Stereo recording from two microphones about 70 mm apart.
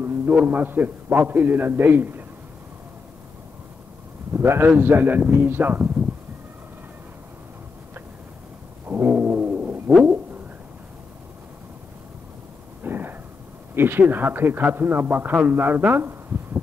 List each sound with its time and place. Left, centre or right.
0.0 s a sound: right
0.5 s a man's voice: right
4.3 s a man's voice: right
8.8 s cat: right
12.8 s a sound: right
13.7 s a man's voice: right